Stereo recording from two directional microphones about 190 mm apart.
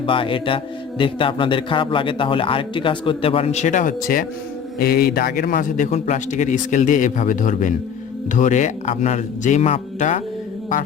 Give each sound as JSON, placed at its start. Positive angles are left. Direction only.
{"t": 0.0, "sound": "speech", "side_deg": 25}